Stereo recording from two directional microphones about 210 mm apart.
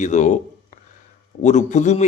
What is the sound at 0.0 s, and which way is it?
Speech, 35° left (ahead or behind).